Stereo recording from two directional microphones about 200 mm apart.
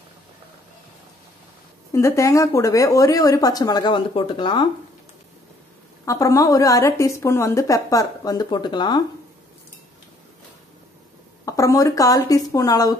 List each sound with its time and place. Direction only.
1.9 s a woman's voice: 15° left (ahead or behind)
6.0 s a woman's voice: 15° left (ahead or behind)
11.4 s a woman's voice: 15° left (ahead or behind)